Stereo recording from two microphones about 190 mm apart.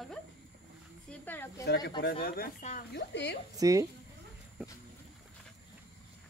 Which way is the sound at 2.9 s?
65° left (ahead or behind).